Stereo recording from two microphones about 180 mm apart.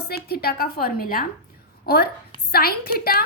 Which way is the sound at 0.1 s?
60° left (ahead or behind).